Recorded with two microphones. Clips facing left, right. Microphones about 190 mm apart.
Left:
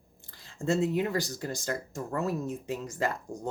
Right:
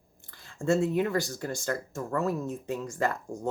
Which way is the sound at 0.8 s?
20° left (ahead or behind).